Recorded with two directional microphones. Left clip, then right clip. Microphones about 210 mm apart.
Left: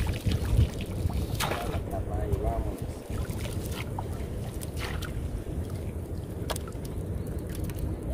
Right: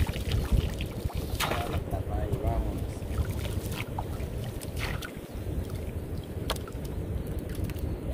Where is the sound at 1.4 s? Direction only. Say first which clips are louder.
Right 1 dB; centre (ahead or behind).